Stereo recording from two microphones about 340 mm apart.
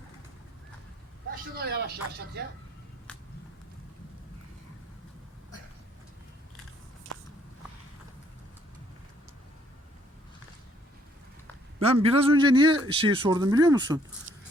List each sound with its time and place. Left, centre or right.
1.3 s speech: right
11.8 s a man's voice: centre